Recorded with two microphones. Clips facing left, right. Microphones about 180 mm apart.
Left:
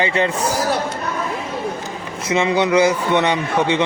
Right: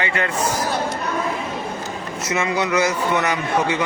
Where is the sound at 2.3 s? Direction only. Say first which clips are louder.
Left 5 dB; 25° left (ahead or behind).